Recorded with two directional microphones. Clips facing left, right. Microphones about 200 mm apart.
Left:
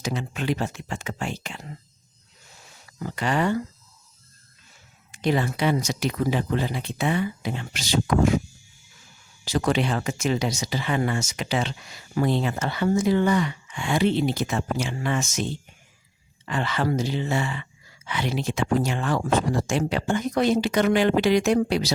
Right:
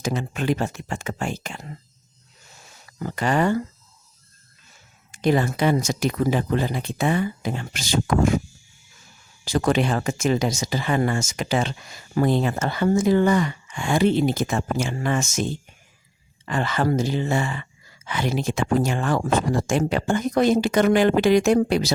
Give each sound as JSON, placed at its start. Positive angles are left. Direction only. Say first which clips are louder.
{"t": 0.0, "sound": "speech", "louder": "right 3 dB", "side_deg": -45}
{"t": 3.0, "sound": "speech", "louder": "right 3 dB", "side_deg": -45}
{"t": 5.1, "sound": "speech", "louder": "right 3 dB", "side_deg": -45}
{"t": 9.4, "sound": "speech", "louder": "right 2 dB", "side_deg": -50}